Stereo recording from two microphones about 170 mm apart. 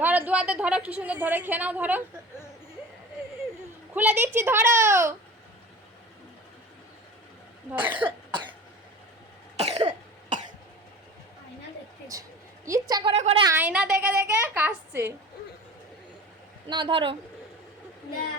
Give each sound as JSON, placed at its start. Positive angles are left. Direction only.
{"t": 0.0, "sound": "a woman's voice", "side_deg": -10}
{"t": 3.9, "sound": "a woman's voice", "side_deg": -10}
{"t": 7.7, "sound": "a woman's voice", "side_deg": -10}
{"t": 8.0, "sound": "cough", "side_deg": -25}
{"t": 9.6, "sound": "cough", "side_deg": -40}
{"t": 12.1, "sound": "a sound", "side_deg": -20}
{"t": 13.1, "sound": "a sound", "side_deg": -40}
{"t": 13.4, "sound": "a woman's voice", "side_deg": -15}
{"t": 16.6, "sound": "a woman's voice", "side_deg": -30}